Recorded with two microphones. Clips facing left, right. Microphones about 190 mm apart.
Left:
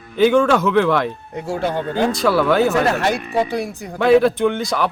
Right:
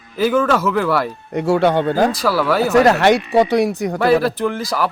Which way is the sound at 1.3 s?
75° right (ahead or behind).